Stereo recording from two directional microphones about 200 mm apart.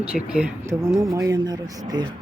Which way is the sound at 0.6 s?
15° right (ahead or behind).